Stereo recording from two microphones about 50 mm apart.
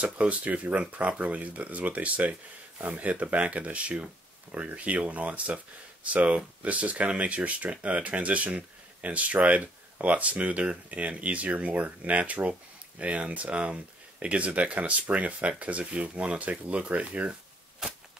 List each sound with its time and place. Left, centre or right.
0.0 s speech: right